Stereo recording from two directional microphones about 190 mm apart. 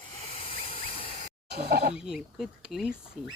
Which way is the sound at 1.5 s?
55° right (ahead or behind).